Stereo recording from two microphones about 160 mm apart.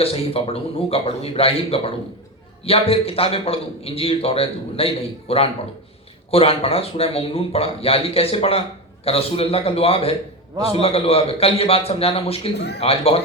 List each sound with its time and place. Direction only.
0.0 s a man's voice: 35° left (ahead or behind)
12.5 s a man's voice: 90° left
12.8 s a man's voice: 35° left (ahead or behind)